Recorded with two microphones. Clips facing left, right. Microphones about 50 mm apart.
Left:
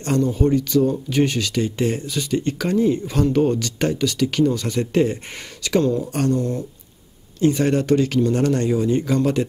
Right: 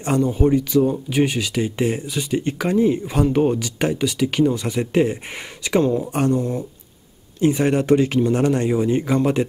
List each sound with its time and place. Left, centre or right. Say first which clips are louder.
0.0 s speech: right 1 dB; centre